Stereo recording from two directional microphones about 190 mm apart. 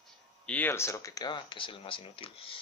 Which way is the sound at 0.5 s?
10° left (ahead or behind).